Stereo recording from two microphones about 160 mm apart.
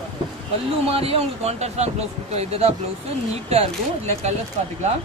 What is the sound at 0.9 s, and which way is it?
Speech, 35° right (ahead or behind).